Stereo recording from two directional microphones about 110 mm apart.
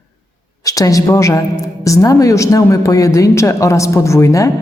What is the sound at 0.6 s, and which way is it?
A woman's voice, 30° left (ahead or behind).